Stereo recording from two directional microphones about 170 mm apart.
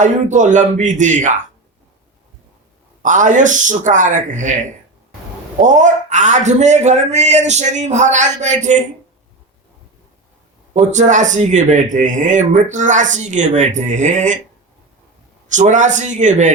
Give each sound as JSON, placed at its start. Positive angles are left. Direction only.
{"t": 0.0, "sound": "speech", "side_deg": -50}
{"t": 3.0, "sound": "speech", "side_deg": -50}
{"t": 10.8, "sound": "speech", "side_deg": -45}
{"t": 15.4, "sound": "speech", "side_deg": -45}